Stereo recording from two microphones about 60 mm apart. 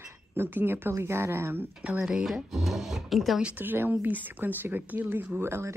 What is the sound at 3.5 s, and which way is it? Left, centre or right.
Speech, right.